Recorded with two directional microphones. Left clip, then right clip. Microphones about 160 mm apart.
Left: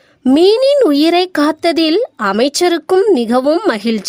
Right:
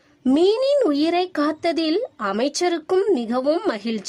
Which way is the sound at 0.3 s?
40° left (ahead or behind).